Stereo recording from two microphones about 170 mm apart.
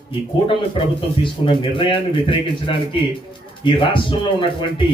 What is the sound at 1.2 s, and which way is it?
A man's voice, 30° left (ahead or behind).